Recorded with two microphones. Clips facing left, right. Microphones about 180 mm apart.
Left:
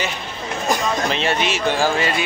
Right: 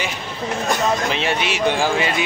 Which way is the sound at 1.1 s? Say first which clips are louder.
Left 1 dB; 10° right (ahead or behind).